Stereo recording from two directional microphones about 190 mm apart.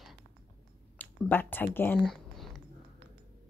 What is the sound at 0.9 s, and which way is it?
Speech, 10° left (ahead or behind).